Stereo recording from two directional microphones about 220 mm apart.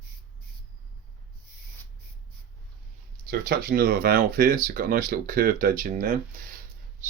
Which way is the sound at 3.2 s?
45° right (ahead or behind).